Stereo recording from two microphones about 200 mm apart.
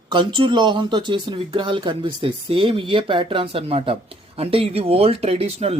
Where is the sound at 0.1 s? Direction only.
25° right (ahead or behind).